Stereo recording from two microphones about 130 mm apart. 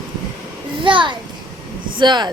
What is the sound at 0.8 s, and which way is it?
A child's voice, 40° right (ahead or behind).